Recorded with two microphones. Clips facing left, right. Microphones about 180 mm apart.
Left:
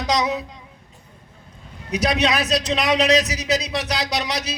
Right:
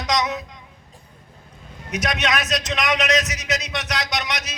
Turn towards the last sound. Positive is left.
turn(degrees=35)  # may be behind; listen again after turning